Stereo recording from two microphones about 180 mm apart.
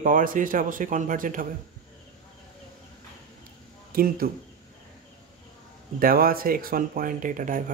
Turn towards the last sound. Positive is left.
turn(degrees=-45)  # may be behind; listen again after turning